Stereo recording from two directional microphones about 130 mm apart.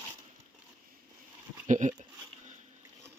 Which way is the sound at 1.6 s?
75° right (ahead or behind).